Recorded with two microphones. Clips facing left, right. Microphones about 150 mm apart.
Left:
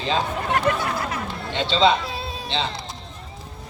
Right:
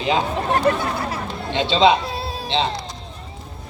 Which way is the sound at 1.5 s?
15° right (ahead or behind).